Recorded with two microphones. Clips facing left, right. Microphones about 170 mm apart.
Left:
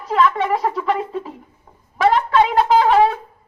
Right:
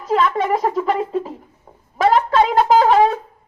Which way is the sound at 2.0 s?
40° right (ahead or behind).